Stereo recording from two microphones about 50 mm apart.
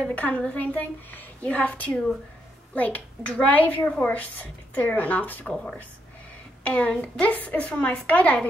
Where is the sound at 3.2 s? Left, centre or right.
Left.